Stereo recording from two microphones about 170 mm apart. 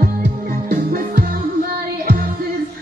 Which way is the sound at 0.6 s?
60° right (ahead or behind).